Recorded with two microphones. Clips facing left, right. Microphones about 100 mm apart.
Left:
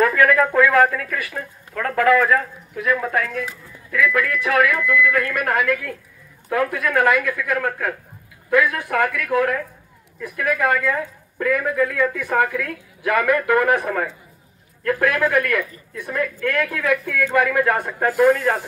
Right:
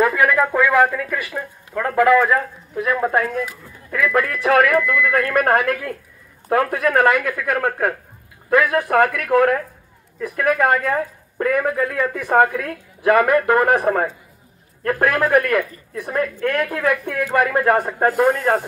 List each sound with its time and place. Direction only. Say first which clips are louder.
0.0 s speech: even; 15° right (ahead or behind)
1.7 s speech: right 2 dB; 20° right (ahead or behind)
18.0 s speech: left 2 dB; 50° right (ahead or behind)